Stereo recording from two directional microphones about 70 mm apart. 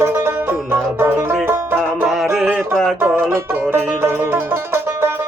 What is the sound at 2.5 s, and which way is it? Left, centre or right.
Music, centre.